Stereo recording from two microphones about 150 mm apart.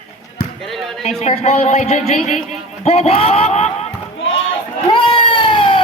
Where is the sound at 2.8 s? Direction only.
40° left (ahead or behind).